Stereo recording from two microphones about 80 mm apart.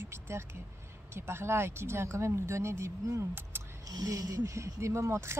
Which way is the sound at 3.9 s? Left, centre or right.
Right.